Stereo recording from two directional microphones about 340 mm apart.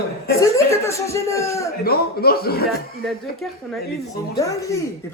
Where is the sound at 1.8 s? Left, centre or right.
Left.